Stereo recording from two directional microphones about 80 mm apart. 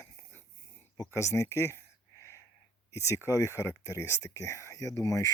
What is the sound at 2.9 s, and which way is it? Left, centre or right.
Speech, left.